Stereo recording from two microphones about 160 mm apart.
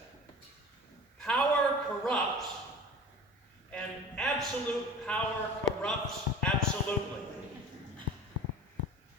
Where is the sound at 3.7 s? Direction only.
5° left (ahead or behind).